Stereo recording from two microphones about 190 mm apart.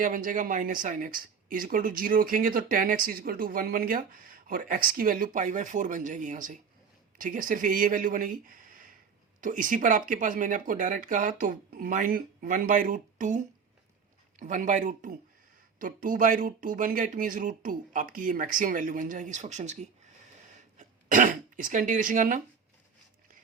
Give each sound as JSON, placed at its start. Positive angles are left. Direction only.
{"t": 0.0, "sound": "speech", "side_deg": -45}